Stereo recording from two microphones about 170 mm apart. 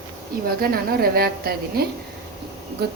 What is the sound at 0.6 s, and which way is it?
A woman's voice, 65° right (ahead or behind).